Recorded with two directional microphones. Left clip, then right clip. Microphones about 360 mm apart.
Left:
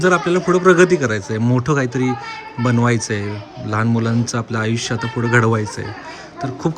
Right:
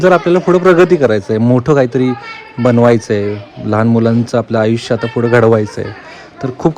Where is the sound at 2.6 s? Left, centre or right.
Right.